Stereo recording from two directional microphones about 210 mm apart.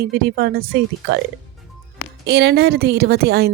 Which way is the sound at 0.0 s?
50° right (ahead or behind).